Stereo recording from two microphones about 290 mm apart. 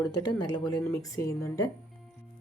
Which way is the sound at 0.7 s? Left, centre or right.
Centre.